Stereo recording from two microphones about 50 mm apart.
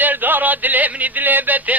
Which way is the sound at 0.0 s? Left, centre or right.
Right.